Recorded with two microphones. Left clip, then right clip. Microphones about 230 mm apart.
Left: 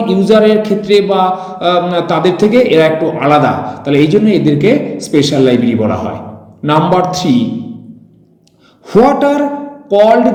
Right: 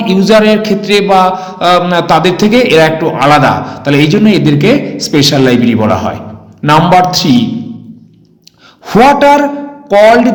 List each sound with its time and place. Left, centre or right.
0.0 s a man's voice: right
8.9 s a man's voice: right